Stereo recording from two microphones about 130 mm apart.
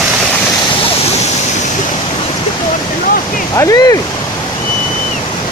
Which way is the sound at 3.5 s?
25° left (ahead or behind).